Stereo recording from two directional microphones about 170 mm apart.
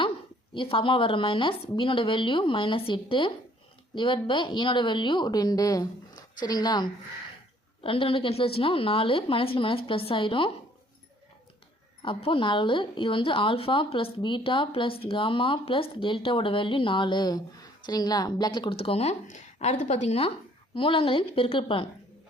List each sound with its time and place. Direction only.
0.5 s a woman's voice: 30° left (ahead or behind)
12.0 s a woman's voice: 30° left (ahead or behind)